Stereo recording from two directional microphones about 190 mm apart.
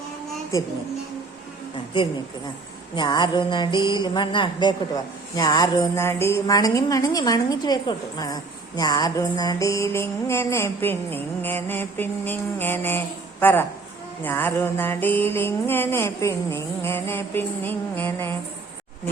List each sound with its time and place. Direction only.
2.9 s mantra: 25° left (ahead or behind)
5.4 s a woman's voice: 20° left (ahead or behind)